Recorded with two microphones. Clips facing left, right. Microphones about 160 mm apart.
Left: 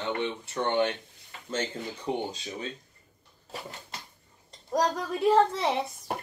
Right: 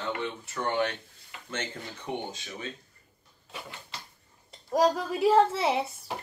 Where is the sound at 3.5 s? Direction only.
40° left (ahead or behind).